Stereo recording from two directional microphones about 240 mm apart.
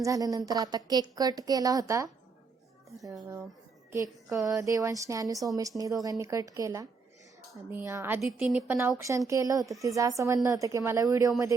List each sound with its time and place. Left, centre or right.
0.0 s a woman's voice: centre
4.4 s a woman's voice: centre